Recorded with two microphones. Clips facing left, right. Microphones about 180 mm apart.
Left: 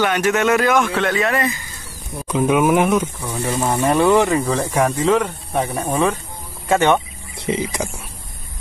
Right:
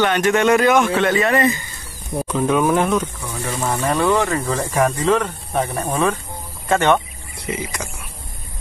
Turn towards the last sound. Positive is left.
turn(degrees=15)  # may be behind; listen again after turning